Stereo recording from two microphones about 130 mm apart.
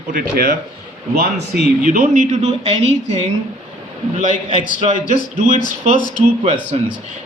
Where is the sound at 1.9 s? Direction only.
90° right.